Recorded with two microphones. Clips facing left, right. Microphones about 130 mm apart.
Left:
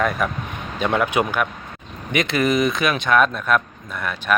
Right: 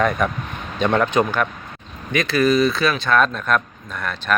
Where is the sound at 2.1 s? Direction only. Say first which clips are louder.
Right 2 dB; 20° left (ahead or behind).